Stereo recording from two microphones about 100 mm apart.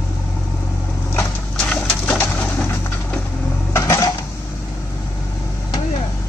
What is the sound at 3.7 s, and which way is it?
Dishes, 30° left (ahead or behind).